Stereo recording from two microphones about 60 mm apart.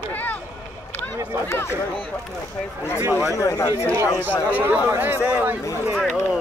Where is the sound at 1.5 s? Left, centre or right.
Left.